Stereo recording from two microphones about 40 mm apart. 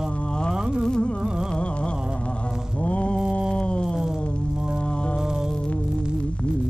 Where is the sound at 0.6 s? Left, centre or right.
Centre.